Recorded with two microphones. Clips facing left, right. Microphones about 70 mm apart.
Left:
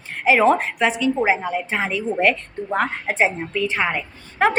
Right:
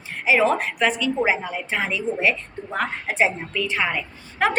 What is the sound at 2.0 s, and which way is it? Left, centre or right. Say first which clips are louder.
Speech: left 4 dB; left.